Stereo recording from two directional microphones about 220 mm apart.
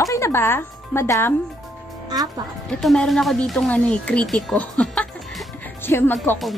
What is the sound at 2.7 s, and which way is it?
A woman's voice, centre (ahead or behind).